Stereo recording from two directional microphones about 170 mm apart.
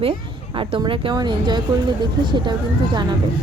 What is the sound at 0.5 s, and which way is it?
A woman's voice, 30° right (ahead or behind).